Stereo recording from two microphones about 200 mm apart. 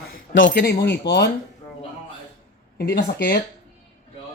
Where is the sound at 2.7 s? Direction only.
50° left (ahead or behind).